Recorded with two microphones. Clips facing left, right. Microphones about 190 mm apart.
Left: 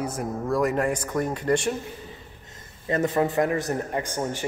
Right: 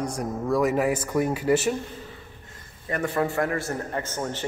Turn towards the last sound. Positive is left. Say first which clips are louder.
# left 2 dB
turn(degrees=10)  # may be behind; listen again after turning